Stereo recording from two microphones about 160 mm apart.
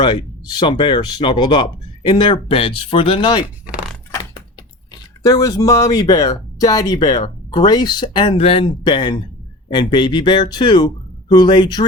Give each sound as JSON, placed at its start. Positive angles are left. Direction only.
{"t": 0.0, "sound": "speech", "side_deg": 30}
{"t": 5.2, "sound": "speech", "side_deg": 20}